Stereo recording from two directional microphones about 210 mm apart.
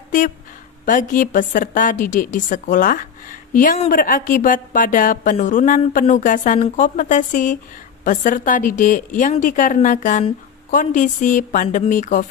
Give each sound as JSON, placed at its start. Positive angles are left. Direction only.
{"t": 0.9, "sound": "speech", "side_deg": 40}